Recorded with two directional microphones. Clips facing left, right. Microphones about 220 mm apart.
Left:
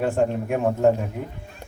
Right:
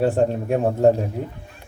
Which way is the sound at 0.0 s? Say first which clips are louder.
Right 3 dB; 35° right (ahead or behind).